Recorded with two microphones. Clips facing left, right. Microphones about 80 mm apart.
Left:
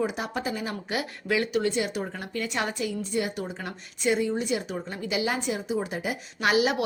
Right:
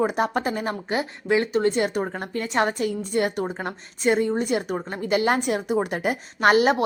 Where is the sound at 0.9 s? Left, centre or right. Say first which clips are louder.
Right 5 dB; right.